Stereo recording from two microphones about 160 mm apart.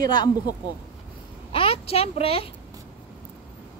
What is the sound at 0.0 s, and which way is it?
Speech, 25° left (ahead or behind).